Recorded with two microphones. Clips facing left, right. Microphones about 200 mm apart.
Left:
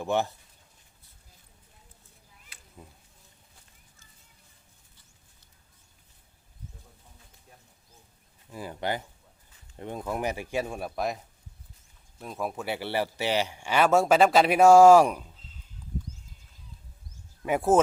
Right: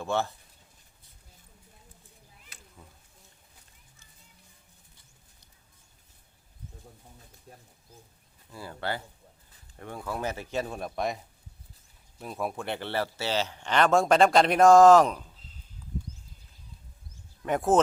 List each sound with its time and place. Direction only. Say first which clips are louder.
0.0 s a man's voice: left 2 dB; 15° left (ahead or behind)
8.4 s a man's voice: left 3 dB; 15° left (ahead or behind)
12.2 s a man's voice: even; centre (ahead or behind)
17.4 s a man's voice: left 1 dB; 10° left (ahead or behind)